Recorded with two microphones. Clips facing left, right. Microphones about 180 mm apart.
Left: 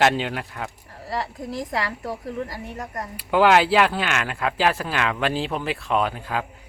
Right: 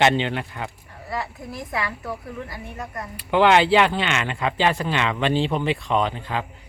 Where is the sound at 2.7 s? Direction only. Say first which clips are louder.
Even; 40° left (ahead or behind).